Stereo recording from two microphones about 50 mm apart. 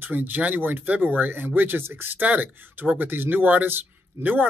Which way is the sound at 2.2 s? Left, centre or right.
Right.